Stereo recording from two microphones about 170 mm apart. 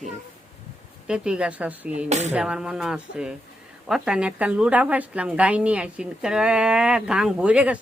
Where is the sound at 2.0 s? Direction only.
40° right (ahead or behind).